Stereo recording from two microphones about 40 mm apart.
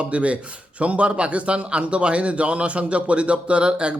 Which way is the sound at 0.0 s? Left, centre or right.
Right.